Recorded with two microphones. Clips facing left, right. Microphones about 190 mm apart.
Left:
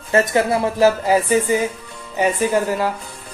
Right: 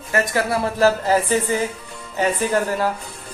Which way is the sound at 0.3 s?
20° left (ahead or behind).